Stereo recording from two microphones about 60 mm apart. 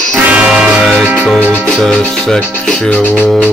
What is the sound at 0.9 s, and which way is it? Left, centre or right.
Music, right.